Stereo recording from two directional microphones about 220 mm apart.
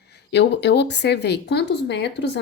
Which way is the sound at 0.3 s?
50° left (ahead or behind).